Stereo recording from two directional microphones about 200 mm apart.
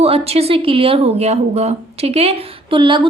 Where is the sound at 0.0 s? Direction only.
30° right (ahead or behind).